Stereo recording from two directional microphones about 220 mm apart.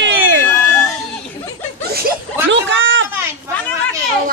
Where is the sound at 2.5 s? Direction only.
60° right (ahead or behind).